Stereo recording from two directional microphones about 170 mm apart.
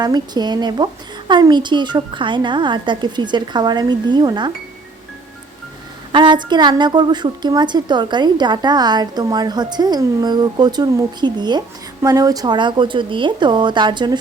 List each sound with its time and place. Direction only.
0.0 s a woman's voice: 25° right (ahead or behind)
6.1 s a woman's voice: 25° right (ahead or behind)